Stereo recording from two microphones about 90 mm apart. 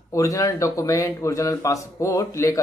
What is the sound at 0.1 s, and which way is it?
Speech, 40° left (ahead or behind).